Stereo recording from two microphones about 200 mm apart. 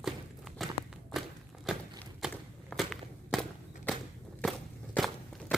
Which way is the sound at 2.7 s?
Centre (ahead or behind).